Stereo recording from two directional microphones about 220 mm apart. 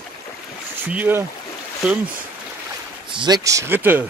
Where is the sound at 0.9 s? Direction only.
10° right (ahead or behind).